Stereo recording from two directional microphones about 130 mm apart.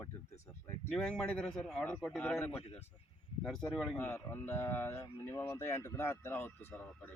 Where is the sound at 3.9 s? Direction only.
15° left (ahead or behind).